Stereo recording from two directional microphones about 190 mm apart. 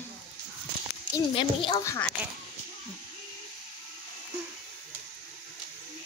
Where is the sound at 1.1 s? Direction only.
25° left (ahead or behind).